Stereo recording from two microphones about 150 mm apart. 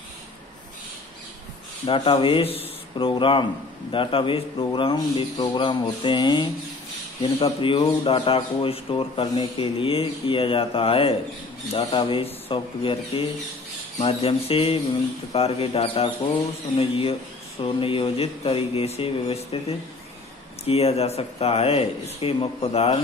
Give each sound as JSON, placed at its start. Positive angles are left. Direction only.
{"t": 1.9, "sound": "speech", "side_deg": 35}
{"t": 20.6, "sound": "speech", "side_deg": 40}